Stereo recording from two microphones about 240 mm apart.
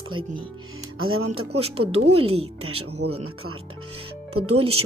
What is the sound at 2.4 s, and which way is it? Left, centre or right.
Speech, right.